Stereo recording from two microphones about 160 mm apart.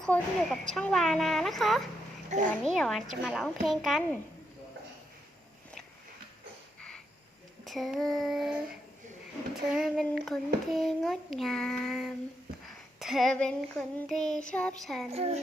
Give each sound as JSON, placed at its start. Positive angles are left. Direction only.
{"t": 0.0, "sound": "child singing", "side_deg": 5}
{"t": 7.6, "sound": "child singing", "side_deg": 0}
{"t": 9.7, "sound": "child singing", "side_deg": -5}
{"t": 15.1, "sound": "a woman's voice", "side_deg": -40}